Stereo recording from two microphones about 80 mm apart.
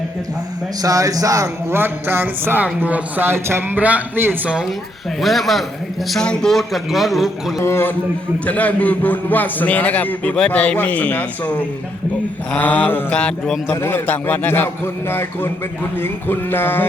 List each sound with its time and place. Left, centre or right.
0.8 s speech: right
1.7 s speech: right
3.8 s speech: centre
4.4 s a man's voice: centre
7.6 s a man's voice: left
8.4 s a man's voice: centre
12.5 s a man's voice: left
13.1 s speech: centre
13.7 s a man's voice: left